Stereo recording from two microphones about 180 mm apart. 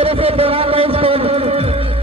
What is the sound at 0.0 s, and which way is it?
Music, 30° right (ahead or behind).